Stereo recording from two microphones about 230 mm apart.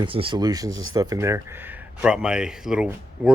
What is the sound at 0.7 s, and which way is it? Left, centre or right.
Speech, right.